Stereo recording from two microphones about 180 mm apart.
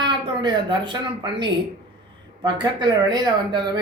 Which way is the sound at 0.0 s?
25° right (ahead or behind).